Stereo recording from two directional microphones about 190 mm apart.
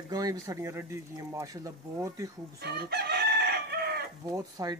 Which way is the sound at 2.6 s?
60° right (ahead or behind).